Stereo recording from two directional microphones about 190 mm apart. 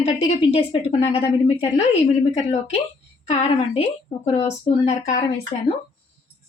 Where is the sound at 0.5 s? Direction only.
30° left (ahead or behind).